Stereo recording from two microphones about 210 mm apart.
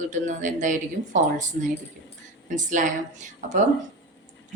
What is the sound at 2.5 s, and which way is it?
Speech, 35° right (ahead or behind).